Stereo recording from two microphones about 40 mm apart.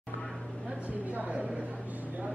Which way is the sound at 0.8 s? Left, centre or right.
Right.